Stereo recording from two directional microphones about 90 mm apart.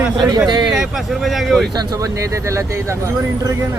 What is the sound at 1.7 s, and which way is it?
Speech, 45° right (ahead or behind).